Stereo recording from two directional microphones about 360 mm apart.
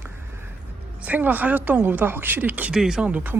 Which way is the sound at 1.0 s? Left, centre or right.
Centre.